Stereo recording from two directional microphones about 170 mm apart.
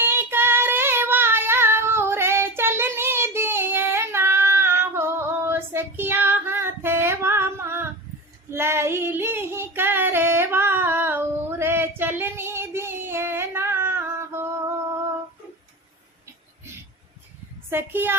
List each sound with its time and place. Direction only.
0.0 s child singing: 10° right (ahead or behind)
8.4 s female singing: 15° right (ahead or behind)
17.7 s a woman's voice: 10° right (ahead or behind)